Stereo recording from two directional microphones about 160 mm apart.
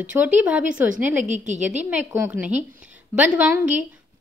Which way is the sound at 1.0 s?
50° right (ahead or behind).